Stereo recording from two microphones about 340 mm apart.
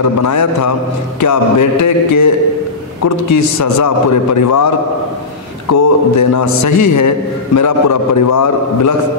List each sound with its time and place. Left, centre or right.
0.2 s a man's voice: left